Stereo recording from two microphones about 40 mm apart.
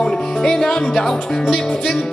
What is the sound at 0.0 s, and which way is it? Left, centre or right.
Music, centre.